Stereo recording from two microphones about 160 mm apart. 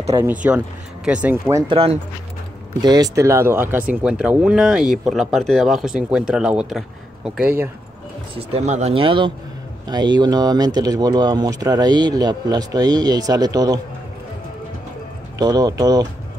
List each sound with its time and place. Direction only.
0.1 s speech: 15° right (ahead or behind)
1.7 s speech: 35° right (ahead or behind)
2.8 s speech: 25° right (ahead or behind)
8.4 s speech: 40° right (ahead or behind); by 13.7 s 25° right (ahead or behind)
15.3 s speech: 25° right (ahead or behind)